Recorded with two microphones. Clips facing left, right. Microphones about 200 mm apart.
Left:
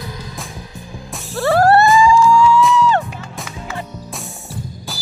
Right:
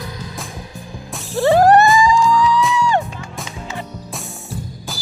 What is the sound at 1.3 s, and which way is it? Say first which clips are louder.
Music: right 2 dB; 15° right (ahead or behind).